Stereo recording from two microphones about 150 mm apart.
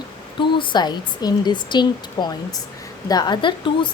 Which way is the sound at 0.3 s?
30° left (ahead or behind).